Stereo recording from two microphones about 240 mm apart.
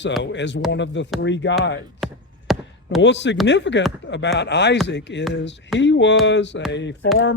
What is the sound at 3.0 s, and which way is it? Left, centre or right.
Speech, left.